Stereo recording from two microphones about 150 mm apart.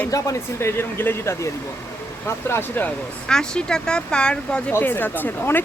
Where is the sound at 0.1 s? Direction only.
20° left (ahead or behind).